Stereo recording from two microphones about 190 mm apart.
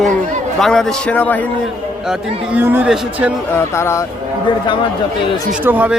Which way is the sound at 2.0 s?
5° right (ahead or behind).